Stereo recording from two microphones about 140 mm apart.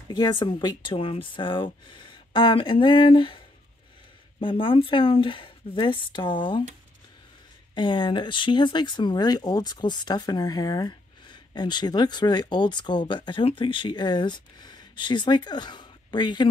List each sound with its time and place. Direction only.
0.1 s speech: 30° left (ahead or behind)
7.7 s speech: 35° left (ahead or behind)